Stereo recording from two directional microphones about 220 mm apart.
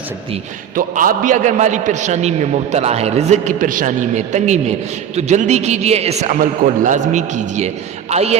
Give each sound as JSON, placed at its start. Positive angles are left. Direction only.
{"t": 0.8, "sound": "a man's voice", "side_deg": -40}